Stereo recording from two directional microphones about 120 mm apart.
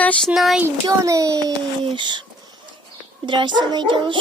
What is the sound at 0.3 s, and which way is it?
Speech, 5° right (ahead or behind).